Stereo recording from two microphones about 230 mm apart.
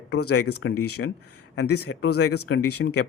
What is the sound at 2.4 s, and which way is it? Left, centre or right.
Speech, left.